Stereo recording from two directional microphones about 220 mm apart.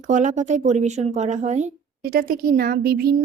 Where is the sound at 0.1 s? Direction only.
35° right (ahead or behind).